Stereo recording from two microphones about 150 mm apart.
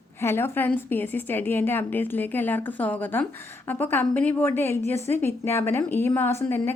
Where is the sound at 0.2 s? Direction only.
15° left (ahead or behind).